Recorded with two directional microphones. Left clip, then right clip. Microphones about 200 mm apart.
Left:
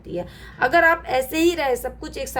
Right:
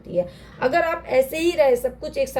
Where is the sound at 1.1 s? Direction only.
35° left (ahead or behind).